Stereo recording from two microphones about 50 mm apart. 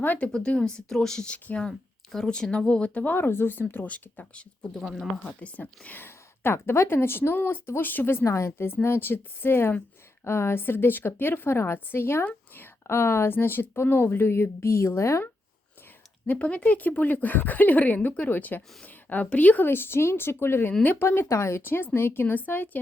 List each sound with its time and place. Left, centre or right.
0.3 s speech: centre
1.3 s speech: left
2.1 s speech: centre
3.0 s a woman's voice: left
3.8 s speech: left
5.9 s a woman's voice: left
8.2 s a woman's voice: left
8.5 s a woman's voice: left
13.3 s a woman's voice: left
16.2 s speech: left
19.6 s a woman's voice: left
21.2 s speech: left
21.6 s a woman's voice: left